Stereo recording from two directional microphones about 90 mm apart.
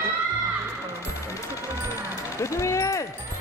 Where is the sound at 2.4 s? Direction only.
35° left (ahead or behind).